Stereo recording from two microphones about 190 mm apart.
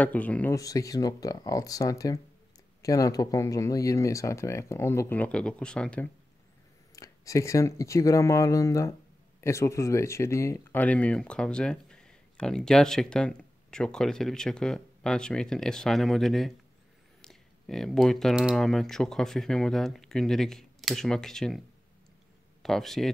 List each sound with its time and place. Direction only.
0.0 s speech: 5° left (ahead or behind)
7.0 s speech: 15° left (ahead or behind); by 23.0 s centre (ahead or behind)